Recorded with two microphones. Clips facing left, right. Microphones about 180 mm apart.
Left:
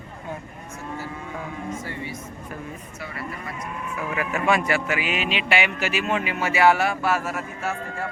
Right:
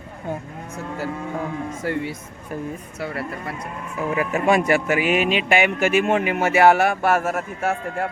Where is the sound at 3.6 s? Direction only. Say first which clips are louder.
Right 1 dB; 35° right (ahead or behind).